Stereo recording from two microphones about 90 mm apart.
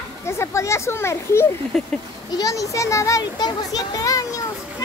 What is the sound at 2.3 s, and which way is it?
Speech, 40° left (ahead or behind).